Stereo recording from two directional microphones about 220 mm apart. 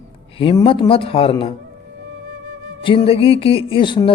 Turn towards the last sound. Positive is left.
turn(degrees=20)  # may be behind; listen again after turning